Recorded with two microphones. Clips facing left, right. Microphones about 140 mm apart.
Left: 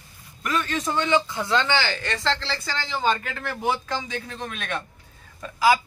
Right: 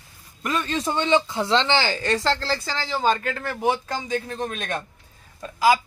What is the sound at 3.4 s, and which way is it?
Speech, 20° right (ahead or behind).